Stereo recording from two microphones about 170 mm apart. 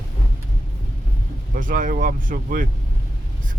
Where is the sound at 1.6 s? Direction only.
50° right (ahead or behind).